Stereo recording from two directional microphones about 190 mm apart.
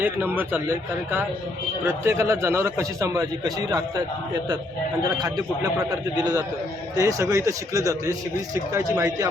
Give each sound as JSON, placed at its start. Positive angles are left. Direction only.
{"t": 0.0, "sound": "a man's voice", "side_deg": -10}
{"t": 5.9, "sound": "a man's voice", "side_deg": -20}